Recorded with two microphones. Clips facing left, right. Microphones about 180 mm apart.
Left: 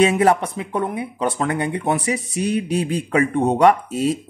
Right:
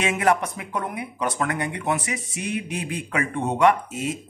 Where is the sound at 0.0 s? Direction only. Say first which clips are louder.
Left 6 dB; 30° left (ahead or behind).